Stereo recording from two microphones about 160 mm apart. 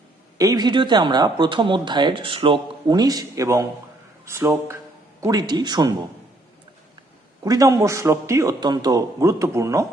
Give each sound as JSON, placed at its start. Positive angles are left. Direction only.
{"t": 0.3, "sound": "speech", "side_deg": -25}
{"t": 7.4, "sound": "speech", "side_deg": -20}